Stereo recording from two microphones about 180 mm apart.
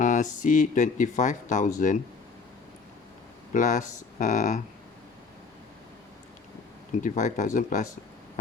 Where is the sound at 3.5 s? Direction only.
45° left (ahead or behind).